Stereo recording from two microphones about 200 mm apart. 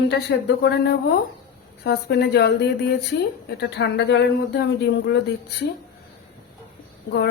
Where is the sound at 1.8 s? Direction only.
55° left (ahead or behind).